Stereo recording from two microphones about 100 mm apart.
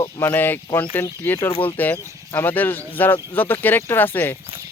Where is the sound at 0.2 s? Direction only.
20° left (ahead or behind).